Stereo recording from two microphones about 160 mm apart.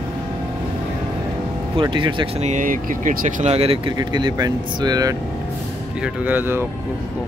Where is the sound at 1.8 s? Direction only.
30° right (ahead or behind).